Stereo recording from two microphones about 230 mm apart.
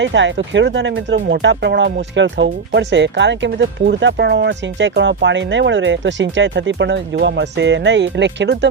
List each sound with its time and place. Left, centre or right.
0.0 s speech: right